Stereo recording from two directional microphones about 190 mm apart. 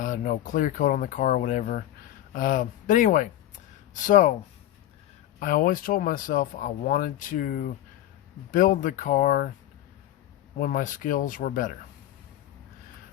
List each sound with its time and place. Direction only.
0.0 s speech: 45° left (ahead or behind)
5.4 s speech: 45° left (ahead or behind)
10.6 s speech: 45° left (ahead or behind)